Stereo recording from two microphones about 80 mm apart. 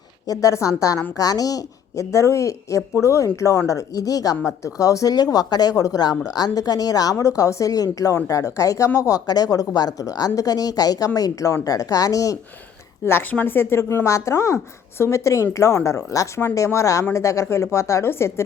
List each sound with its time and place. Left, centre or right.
0.3 s a woman's voice: left
13.3 s a woman's voice: left